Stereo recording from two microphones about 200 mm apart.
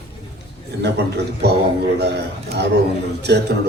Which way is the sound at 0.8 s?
55° right (ahead or behind).